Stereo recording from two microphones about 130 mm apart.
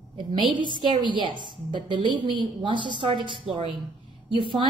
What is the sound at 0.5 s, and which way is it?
A woman's voice, 35° right (ahead or behind).